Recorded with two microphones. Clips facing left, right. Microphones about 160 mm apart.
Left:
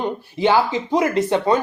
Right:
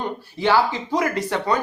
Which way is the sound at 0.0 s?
20° left (ahead or behind).